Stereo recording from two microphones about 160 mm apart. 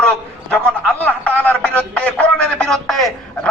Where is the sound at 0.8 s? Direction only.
10° left (ahead or behind).